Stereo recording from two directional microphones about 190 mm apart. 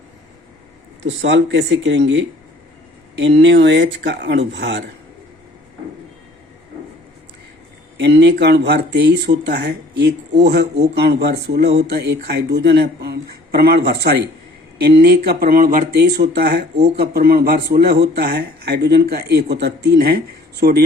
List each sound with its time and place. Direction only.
1.0 s speech: 70° right (ahead or behind)
7.9 s speech: 60° right (ahead or behind)